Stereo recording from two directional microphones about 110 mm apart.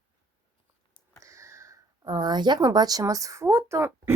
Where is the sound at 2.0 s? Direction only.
40° right (ahead or behind).